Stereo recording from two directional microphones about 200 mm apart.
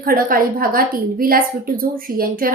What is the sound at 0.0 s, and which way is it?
A woman's voice, 45° right (ahead or behind).